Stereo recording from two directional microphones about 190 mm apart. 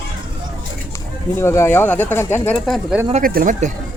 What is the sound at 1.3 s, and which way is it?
Speech, 15° left (ahead or behind).